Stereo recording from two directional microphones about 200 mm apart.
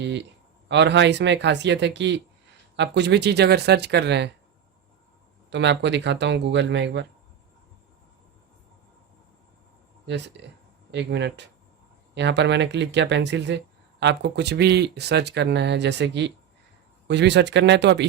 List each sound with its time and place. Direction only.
0.0 s a sound: 60° right (ahead or behind)
0.7 s speech: 60° right (ahead or behind)
5.5 s speech: 60° right (ahead or behind)
10.1 s speech: 60° right (ahead or behind)